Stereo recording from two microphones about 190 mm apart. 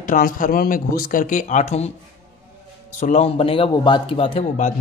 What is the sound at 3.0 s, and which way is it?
Speech, 35° left (ahead or behind).